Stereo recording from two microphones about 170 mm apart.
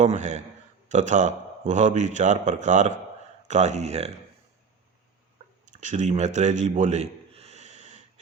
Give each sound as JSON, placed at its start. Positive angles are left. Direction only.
{"t": 0.0, "sound": "a man's voice", "side_deg": -45}
{"t": 5.8, "sound": "a man's voice", "side_deg": -45}